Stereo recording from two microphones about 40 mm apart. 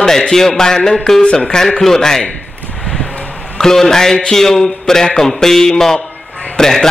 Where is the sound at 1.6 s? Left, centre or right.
Centre.